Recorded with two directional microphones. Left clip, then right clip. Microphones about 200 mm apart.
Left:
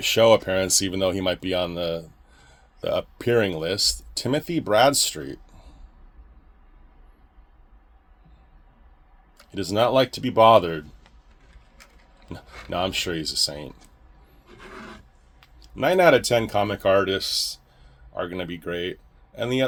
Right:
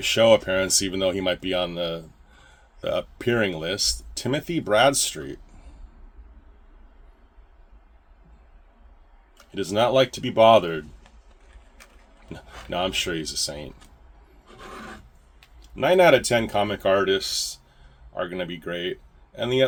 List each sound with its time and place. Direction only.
0.0 s speech: 30° left (ahead or behind)
9.5 s speech: 30° left (ahead or behind)
12.7 s speech: 30° left (ahead or behind)
15.6 s speech: 35° left (ahead or behind)